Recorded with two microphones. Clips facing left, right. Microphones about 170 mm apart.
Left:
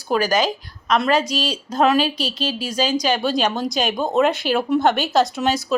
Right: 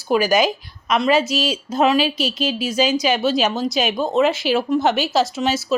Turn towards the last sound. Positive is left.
turn(degrees=-5)  # may be behind; listen again after turning